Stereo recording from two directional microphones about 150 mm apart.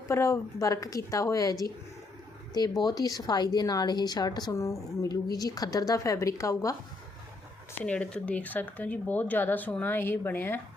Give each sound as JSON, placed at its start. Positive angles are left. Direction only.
{"t": 0.1, "sound": "a woman's voice", "side_deg": 20}
{"t": 2.8, "sound": "a woman's voice", "side_deg": 25}
{"t": 7.9, "sound": "speech", "side_deg": 10}